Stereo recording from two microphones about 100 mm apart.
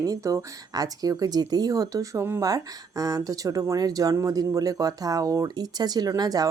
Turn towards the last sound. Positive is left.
turn(degrees=-40)  # may be behind; listen again after turning